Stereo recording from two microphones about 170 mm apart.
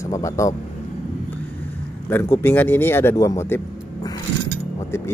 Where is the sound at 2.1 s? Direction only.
10° left (ahead or behind).